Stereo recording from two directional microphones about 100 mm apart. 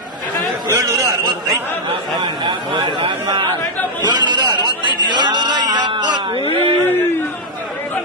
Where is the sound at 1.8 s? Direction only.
55° right (ahead or behind).